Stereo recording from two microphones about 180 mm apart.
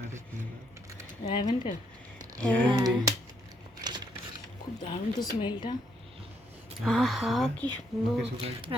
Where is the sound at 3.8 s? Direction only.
20° right (ahead or behind).